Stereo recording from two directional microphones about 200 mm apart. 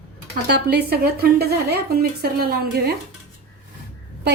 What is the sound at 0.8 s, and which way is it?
A woman's voice, 50° right (ahead or behind).